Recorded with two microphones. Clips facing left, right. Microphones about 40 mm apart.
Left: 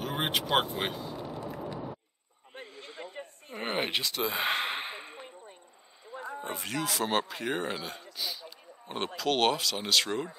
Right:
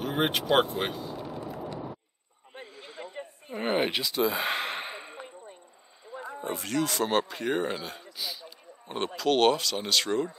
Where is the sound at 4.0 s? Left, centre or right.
Left.